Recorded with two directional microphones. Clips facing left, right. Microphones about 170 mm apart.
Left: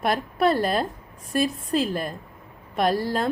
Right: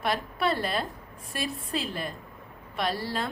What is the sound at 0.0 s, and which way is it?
A woman's voice, 50° left (ahead or behind).